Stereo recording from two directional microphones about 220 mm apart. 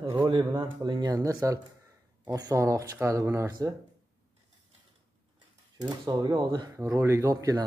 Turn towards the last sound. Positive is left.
turn(degrees=-15)  # may be behind; listen again after turning